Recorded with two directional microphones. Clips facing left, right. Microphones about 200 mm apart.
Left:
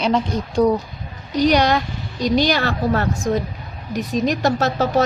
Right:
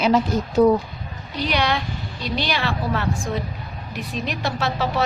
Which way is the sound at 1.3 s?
40° left (ahead or behind).